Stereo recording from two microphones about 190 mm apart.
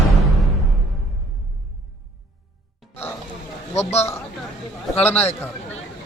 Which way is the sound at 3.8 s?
35° left (ahead or behind).